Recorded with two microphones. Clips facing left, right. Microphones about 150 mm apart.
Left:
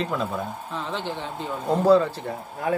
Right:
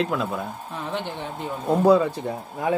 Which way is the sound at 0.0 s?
Centre (ahead or behind).